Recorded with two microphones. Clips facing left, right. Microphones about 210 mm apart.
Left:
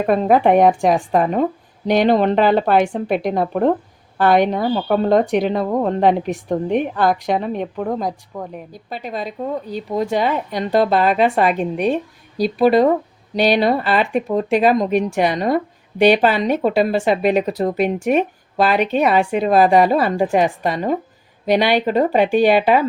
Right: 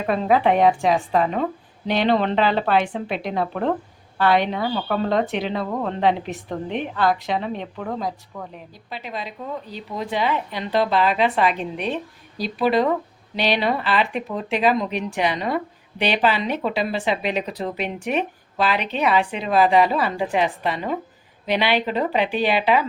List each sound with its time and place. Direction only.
0.0 s speech: 45° left (ahead or behind)